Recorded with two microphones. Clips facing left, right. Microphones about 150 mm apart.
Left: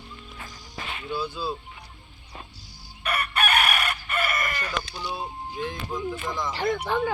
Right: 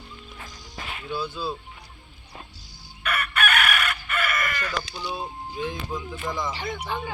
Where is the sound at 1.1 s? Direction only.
10° left (ahead or behind).